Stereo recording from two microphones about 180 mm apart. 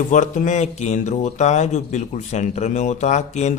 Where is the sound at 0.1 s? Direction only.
45° left (ahead or behind).